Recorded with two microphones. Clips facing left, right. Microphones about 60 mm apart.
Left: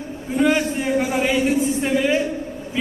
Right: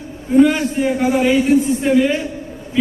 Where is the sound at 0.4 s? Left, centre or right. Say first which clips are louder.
Right 3 dB; centre.